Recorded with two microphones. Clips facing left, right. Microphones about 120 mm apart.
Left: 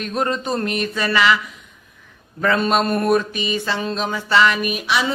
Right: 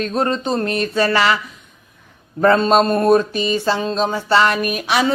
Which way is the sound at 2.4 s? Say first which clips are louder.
Right 5 dB; 35° right (ahead or behind).